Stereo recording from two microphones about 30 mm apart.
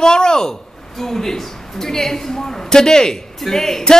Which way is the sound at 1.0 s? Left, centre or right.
Centre.